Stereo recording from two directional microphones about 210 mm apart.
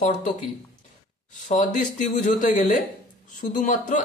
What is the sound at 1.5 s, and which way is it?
Speech, 35° left (ahead or behind).